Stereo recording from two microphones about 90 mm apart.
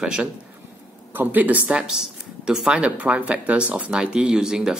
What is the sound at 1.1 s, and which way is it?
Speech, 20° right (ahead or behind).